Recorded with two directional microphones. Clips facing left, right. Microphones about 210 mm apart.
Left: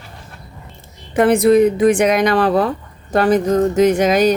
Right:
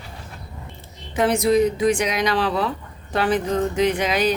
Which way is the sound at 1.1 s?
55° left (ahead or behind).